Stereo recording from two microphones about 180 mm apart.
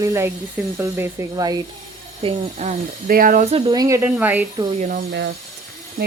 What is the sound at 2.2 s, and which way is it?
Speech, 40° right (ahead or behind).